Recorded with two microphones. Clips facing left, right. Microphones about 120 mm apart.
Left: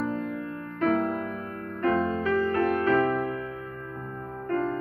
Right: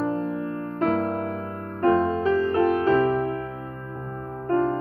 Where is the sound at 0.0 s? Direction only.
30° right (ahead or behind).